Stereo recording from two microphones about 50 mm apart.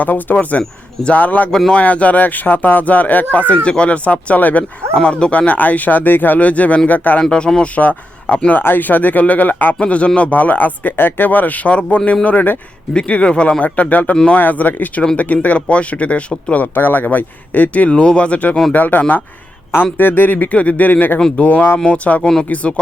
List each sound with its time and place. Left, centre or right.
0.0 s speech: left
1.5 s speech: centre
1.7 s speech: left
3.5 s speech: left
4.9 s speech: left
7.2 s speech: centre
8.5 s speech: left
9.8 s speech: left
12.9 s speech: left
16.7 s speech: left
17.8 s speech: centre; by 21.2 s left
21.2 s speech: centre
21.4 s speech: left